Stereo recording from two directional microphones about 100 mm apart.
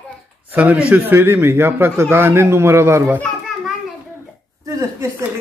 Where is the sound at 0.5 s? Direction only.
15° right (ahead or behind).